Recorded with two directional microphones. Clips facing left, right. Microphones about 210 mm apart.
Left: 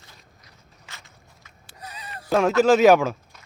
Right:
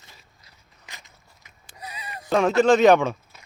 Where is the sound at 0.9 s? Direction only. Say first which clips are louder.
Even; 15° right (ahead or behind).